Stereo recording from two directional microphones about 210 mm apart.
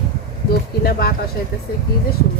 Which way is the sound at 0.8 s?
45° left (ahead or behind).